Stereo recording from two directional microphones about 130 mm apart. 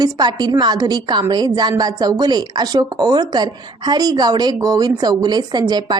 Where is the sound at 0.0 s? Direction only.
30° right (ahead or behind).